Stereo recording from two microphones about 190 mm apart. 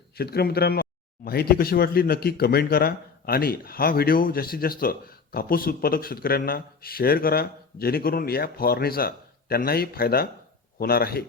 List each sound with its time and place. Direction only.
0.2 s speech: 55° left (ahead or behind)